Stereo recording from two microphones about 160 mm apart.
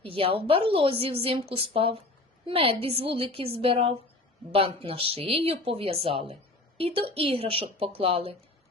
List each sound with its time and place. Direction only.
0.0 s speech: 35° right (ahead or behind)